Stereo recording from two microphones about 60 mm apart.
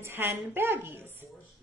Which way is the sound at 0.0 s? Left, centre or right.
Right.